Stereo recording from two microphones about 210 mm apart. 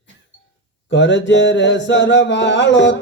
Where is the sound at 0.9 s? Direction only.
60° left (ahead or behind).